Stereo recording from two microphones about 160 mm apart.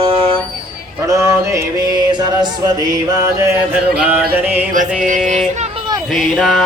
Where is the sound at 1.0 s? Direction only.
20° right (ahead or behind).